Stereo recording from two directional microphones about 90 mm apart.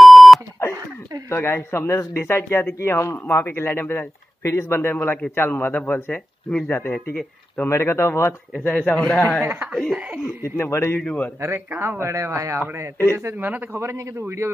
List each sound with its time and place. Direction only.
0.0 s beep: centre (ahead or behind)
1.3 s a man's voice: 25° left (ahead or behind)
7.7 s a man's voice: 30° left (ahead or behind)
8.6 s a man's voice: 15° left (ahead or behind)
9.4 s a man's voice: 20° right (ahead or behind)
9.7 s speech: centre (ahead or behind)
10.2 s a man's voice: 30° left (ahead or behind)
11.0 s a man's voice: 15° left (ahead or behind)
11.7 s speech: 15° right (ahead or behind)
12.0 s a man's voice: 35° right (ahead or behind)